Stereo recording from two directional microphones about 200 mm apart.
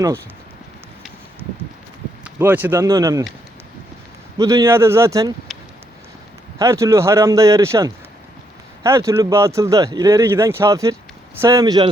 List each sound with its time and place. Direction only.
2.2 s speech: 10° right (ahead or behind)
4.4 s speech: 15° right (ahead or behind)
6.6 s speech: 15° right (ahead or behind)